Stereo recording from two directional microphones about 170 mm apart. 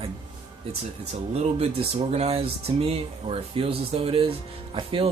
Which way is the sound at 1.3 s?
40° right (ahead or behind).